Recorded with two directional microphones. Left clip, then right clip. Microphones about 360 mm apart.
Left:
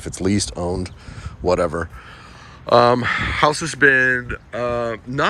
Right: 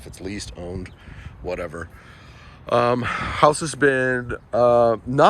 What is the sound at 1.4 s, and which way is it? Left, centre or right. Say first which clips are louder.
Speech: left 10 dB; centre.